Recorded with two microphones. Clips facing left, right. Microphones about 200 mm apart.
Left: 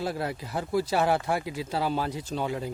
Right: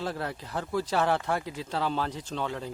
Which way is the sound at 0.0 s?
10° left (ahead or behind).